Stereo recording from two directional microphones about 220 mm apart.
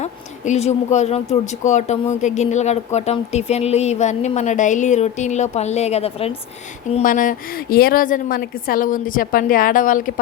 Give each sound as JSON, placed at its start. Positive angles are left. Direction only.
{"t": 0.0, "sound": "speech", "side_deg": 30}
{"t": 6.9, "sound": "speech", "side_deg": 40}